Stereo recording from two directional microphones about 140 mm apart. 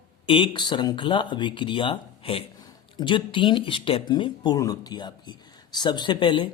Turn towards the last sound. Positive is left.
turn(degrees=35)  # may be behind; listen again after turning